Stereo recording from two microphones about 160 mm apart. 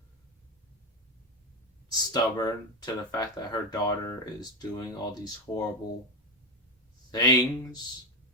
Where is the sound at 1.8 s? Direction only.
25° left (ahead or behind).